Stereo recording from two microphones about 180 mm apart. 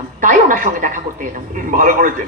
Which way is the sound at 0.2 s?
50° right (ahead or behind).